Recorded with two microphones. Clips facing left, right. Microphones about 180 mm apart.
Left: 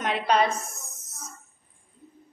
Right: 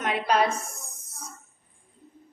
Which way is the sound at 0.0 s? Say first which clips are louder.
Even; 5° right (ahead or behind).